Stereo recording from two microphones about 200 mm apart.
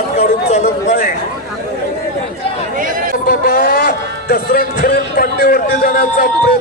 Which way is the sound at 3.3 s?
50° left (ahead or behind).